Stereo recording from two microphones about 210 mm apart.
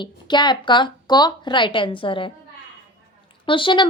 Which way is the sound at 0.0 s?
20° left (ahead or behind).